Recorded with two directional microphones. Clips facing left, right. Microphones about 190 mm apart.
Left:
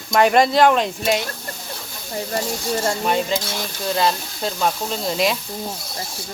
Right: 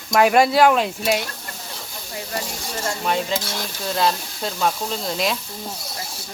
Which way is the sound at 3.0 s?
Centre (ahead or behind).